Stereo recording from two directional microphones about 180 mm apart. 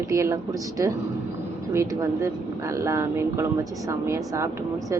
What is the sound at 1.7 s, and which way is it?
A woman's voice, 15° right (ahead or behind).